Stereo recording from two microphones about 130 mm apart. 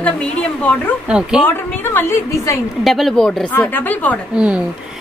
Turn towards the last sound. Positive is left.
turn(degrees=-10)  # may be behind; listen again after turning